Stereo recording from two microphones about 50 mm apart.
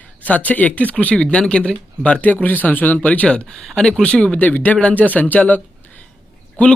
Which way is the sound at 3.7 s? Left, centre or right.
Centre.